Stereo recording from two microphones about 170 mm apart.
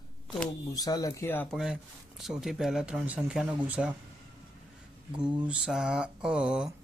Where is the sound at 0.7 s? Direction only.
20° left (ahead or behind).